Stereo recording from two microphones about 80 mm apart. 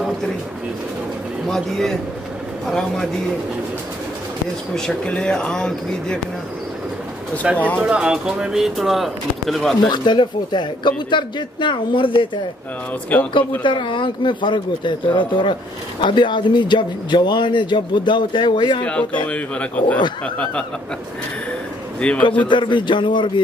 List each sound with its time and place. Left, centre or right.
1.5 s speech: centre
4.7 s speech: centre
7.4 s speech: centre
9.8 s speech: left
13.1 s speech: centre
13.6 s speech: left
18.8 s speech: centre
22.0 s speech: centre
22.5 s speech: left